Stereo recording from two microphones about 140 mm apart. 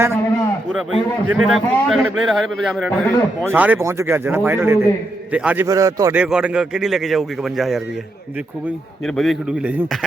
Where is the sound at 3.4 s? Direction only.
10° right (ahead or behind).